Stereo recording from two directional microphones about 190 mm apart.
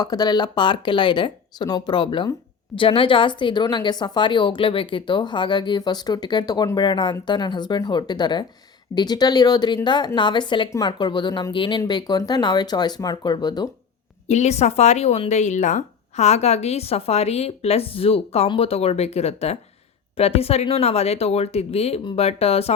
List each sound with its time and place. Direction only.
0.0 s speech: 20° left (ahead or behind)
14.3 s speech: 35° left (ahead or behind)